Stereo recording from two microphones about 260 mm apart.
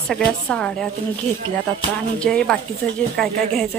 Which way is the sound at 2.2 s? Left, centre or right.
Centre.